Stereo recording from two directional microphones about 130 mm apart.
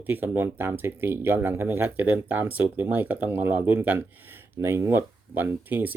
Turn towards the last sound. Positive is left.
turn(degrees=-15)  # may be behind; listen again after turning